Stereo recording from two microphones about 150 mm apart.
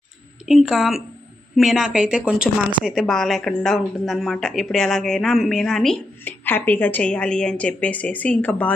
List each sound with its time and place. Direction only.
0.4 s a woman's voice: centre (ahead or behind)
6.2 s a woman's voice: 15° left (ahead or behind)